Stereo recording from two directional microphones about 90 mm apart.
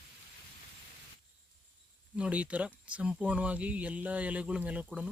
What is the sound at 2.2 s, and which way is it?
Speech, 15° right (ahead or behind).